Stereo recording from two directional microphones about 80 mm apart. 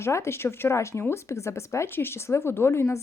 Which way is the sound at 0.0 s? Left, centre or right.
Left.